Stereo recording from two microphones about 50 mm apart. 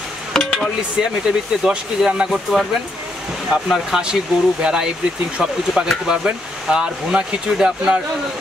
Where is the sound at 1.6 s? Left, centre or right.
Centre.